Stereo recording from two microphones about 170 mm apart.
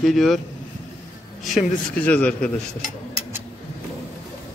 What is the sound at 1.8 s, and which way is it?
Speech, 10° left (ahead or behind).